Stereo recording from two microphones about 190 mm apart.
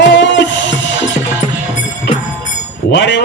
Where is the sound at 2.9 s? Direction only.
70° left (ahead or behind).